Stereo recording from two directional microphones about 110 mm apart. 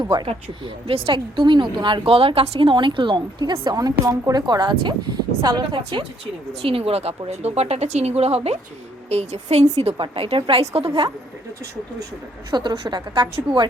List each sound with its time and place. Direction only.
0.0 s speech: 40° right (ahead or behind)
0.3 s speech: 60° right (ahead or behind); by 5.6 s 40° right (ahead or behind)
5.7 s a woman's voice: 55° right (ahead or behind)
9.0 s a woman's voice: 85° right
10.0 s a woman's voice: 55° right (ahead or behind)
10.6 s a woman's voice: 70° right (ahead or behind)
12.5 s speech: 45° right (ahead or behind)